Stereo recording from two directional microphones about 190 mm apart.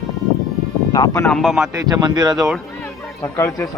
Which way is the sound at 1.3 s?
Centre (ahead or behind).